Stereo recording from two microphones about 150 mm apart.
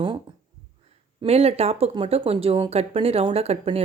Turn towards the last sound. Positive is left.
turn(degrees=-45)  # may be behind; listen again after turning